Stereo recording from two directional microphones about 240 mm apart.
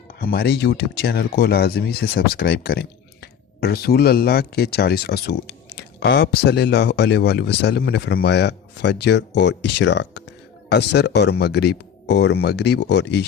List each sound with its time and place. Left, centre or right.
0.2 s speech: left